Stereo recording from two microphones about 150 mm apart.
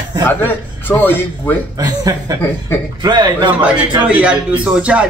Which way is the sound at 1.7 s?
25° right (ahead or behind).